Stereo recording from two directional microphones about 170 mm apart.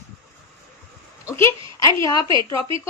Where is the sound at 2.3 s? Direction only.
30° right (ahead or behind).